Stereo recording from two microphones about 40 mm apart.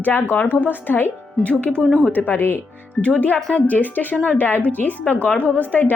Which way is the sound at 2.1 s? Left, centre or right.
Left.